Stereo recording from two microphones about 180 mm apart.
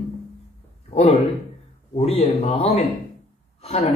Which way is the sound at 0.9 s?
35° left (ahead or behind).